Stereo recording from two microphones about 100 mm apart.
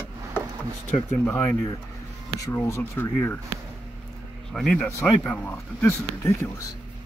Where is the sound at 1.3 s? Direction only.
25° left (ahead or behind).